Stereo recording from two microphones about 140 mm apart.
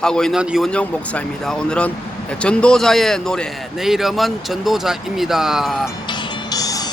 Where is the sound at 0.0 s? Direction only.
5° left (ahead or behind).